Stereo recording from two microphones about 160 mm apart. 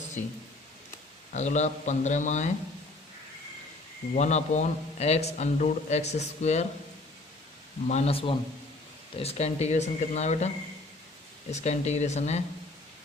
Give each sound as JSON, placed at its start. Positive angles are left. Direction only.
{"t": 1.3, "sound": "a man's voice", "side_deg": 45}
{"t": 4.1, "sound": "a man's voice", "side_deg": 45}
{"t": 7.9, "sound": "a man's voice", "side_deg": 40}
{"t": 11.5, "sound": "a man's voice", "side_deg": 45}